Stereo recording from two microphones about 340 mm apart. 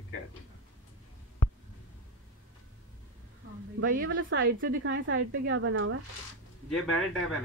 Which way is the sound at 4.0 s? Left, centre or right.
Right.